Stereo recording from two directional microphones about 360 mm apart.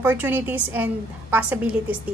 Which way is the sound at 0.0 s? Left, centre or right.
Centre.